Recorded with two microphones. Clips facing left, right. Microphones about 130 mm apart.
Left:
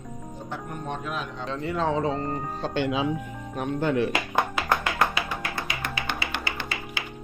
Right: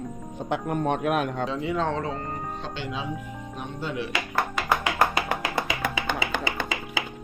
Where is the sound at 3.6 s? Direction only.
55° left (ahead or behind).